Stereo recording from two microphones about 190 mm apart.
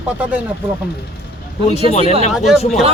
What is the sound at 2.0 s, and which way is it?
Speech, 30° right (ahead or behind).